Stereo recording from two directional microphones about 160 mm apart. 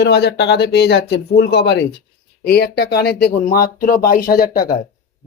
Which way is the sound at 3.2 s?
65° left (ahead or behind).